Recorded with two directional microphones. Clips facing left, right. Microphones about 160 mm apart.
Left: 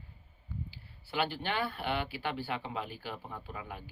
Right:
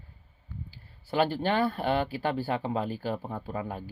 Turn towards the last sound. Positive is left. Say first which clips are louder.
# right 9 dB
turn(degrees=-40)  # may be behind; listen again after turning